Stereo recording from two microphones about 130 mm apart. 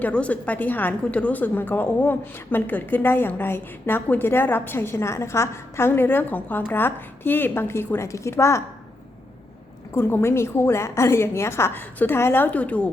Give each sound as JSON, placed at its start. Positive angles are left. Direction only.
{"t": 0.0, "sound": "a woman's voice", "side_deg": 10}
{"t": 9.9, "sound": "a woman's voice", "side_deg": 15}